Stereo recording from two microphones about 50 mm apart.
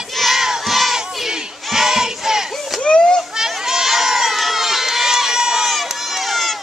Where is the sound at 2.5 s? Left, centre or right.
Centre.